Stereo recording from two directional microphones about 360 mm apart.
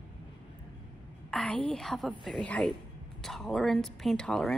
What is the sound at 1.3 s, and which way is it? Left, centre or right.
Speech, centre.